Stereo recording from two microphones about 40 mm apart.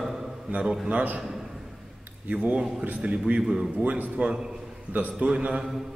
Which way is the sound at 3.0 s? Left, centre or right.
Right.